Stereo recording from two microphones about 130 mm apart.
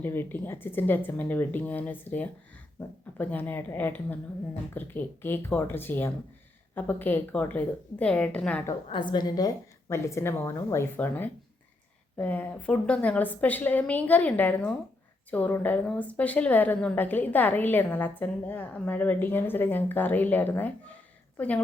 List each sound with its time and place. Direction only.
0.0 s a woman's voice: 15° left (ahead or behind)
8.9 s a woman's voice: 35° left (ahead or behind); by 21.6 s 10° left (ahead or behind)